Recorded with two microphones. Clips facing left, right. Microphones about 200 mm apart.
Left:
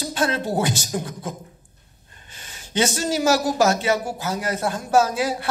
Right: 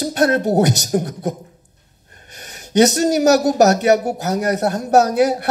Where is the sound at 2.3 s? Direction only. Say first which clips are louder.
Right 9 dB; 40° right (ahead or behind).